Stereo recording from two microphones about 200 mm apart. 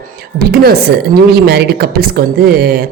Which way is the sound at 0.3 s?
50° right (ahead or behind).